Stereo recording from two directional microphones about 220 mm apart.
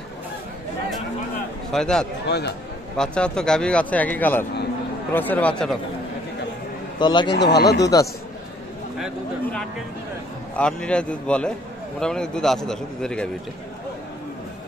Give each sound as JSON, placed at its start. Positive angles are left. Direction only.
{"t": 1.7, "sound": "speech", "side_deg": 0}
{"t": 2.2, "sound": "speech", "side_deg": 50}
{"t": 3.0, "sound": "speech", "side_deg": 5}
{"t": 7.0, "sound": "a man's voice", "side_deg": 20}
{"t": 7.3, "sound": "speech", "side_deg": 50}
{"t": 7.8, "sound": "speech", "side_deg": 15}
{"t": 9.0, "sound": "speech", "side_deg": 5}